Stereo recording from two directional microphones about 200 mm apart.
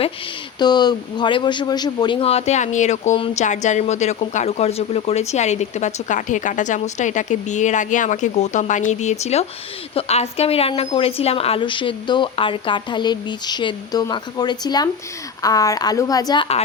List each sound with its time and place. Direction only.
0.6 s a man's voice: 20° left (ahead or behind)